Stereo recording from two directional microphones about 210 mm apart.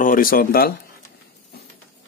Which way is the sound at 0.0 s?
40° left (ahead or behind).